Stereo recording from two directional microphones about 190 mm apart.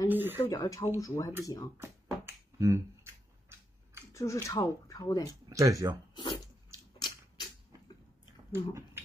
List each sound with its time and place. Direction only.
0.1 s speech: 10° right (ahead or behind)
0.4 s speech: 20° left (ahead or behind)
1.8 s finger snapping: 15° right (ahead or behind)
4.1 s speech: 15° left (ahead or behind)
5.5 s speech: 15° right (ahead or behind)
6.1 s a sound: 25° left (ahead or behind)
8.5 s speech: 10° right (ahead or behind)